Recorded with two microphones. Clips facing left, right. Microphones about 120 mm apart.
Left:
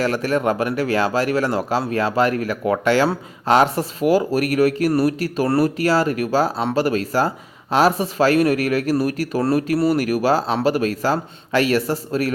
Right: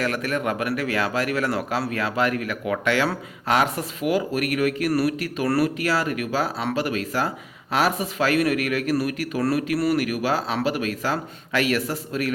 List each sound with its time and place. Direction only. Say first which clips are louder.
0.0 s speech: left 5 dB; 30° left (ahead or behind)